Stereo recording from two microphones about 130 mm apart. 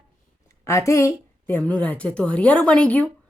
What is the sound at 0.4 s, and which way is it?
Speech, 20° left (ahead or behind).